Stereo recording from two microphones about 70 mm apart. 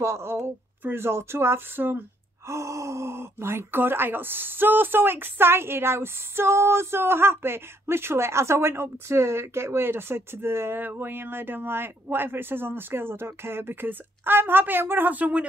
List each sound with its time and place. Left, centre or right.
0.0 s speech: right
2.4 s speech: right